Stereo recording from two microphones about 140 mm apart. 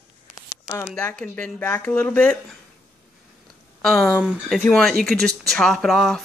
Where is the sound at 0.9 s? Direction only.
10° left (ahead or behind).